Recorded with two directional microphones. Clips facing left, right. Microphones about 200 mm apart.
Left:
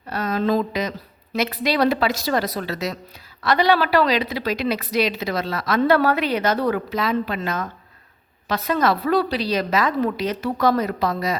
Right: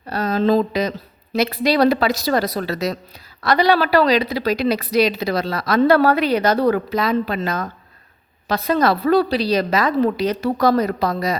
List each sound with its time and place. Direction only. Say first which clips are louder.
0.1 s a woman's voice: right 4 dB; 30° right (ahead or behind)